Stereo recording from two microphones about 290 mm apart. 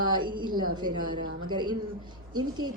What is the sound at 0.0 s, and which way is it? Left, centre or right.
A woman's voice, centre.